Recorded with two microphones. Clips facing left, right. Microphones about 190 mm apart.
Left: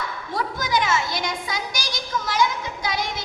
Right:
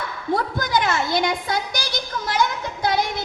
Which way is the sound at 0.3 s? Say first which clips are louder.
Right 1 dB; 55° right (ahead or behind).